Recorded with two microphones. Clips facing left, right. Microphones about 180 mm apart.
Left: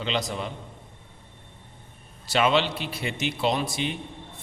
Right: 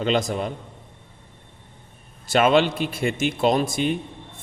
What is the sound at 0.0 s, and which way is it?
Speech, 50° right (ahead or behind).